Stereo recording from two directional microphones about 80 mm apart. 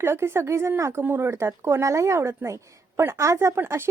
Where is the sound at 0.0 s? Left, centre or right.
Right.